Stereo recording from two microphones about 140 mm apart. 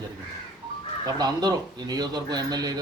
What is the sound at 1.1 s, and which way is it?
Speech, 30° right (ahead or behind).